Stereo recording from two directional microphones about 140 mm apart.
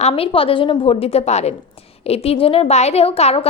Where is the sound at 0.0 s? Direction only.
40° left (ahead or behind).